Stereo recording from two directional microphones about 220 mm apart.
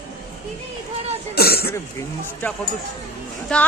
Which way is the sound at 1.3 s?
45° left (ahead or behind).